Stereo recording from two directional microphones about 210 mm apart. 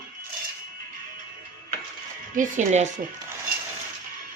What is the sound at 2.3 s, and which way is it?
Speech, 35° right (ahead or behind).